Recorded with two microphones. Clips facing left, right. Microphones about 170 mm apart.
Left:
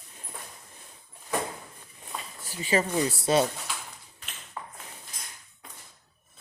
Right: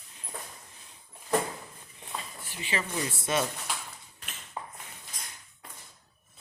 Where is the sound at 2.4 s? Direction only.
40° left (ahead or behind).